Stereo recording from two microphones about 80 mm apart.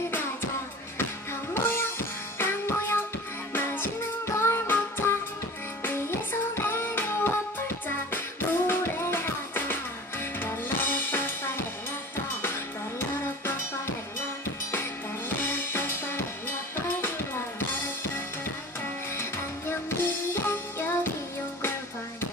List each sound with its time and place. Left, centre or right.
1.5 s music: left
10.4 s drum kit: left
14.7 s music: left
20.3 s music: left